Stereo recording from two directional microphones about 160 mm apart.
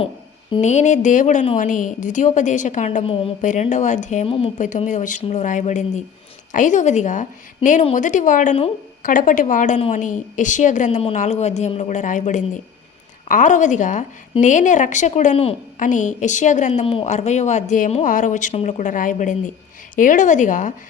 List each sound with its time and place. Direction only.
0.6 s speech: 45° left (ahead or behind)
3.0 s a woman's voice: 35° left (ahead or behind)
3.4 s speech: 50° left (ahead or behind)
4.3 s a woman's voice: 35° left (ahead or behind)
4.5 s speech: 50° left (ahead or behind)
16.8 s speech: 35° left (ahead or behind); by 20.7 s 50° left (ahead or behind)